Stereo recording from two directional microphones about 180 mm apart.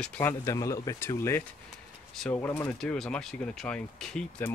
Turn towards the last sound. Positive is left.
turn(degrees=5)  # may be behind; listen again after turning